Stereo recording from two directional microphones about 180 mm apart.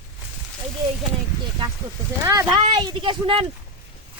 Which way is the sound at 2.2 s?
20° right (ahead or behind).